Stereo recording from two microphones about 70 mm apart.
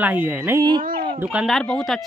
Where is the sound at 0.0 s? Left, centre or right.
Right.